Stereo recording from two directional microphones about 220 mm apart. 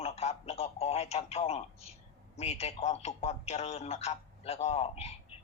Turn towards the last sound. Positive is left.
turn(degrees=30)  # may be behind; listen again after turning